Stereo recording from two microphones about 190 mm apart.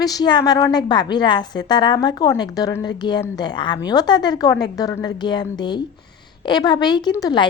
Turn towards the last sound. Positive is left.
turn(degrees=20)  # may be behind; listen again after turning